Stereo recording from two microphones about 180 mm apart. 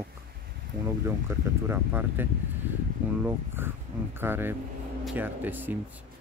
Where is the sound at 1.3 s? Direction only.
15° right (ahead or behind).